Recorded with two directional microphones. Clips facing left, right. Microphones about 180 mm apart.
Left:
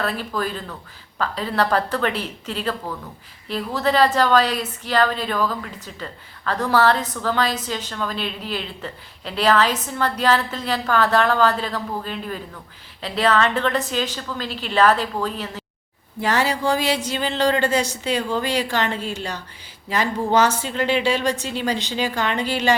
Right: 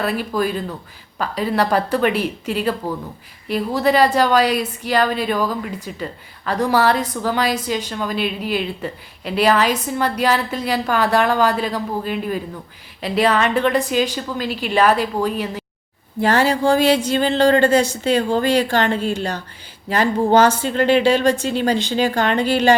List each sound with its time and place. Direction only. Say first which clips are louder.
0.0 s speech: right 4 dB; 10° right (ahead or behind)
16.2 s a woman's voice: right 5 dB; 55° right (ahead or behind)
20.6 s a woman's voice: right 6 dB; 55° right (ahead or behind)